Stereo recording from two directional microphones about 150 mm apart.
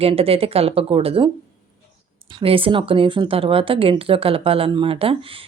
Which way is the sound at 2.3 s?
40° right (ahead or behind).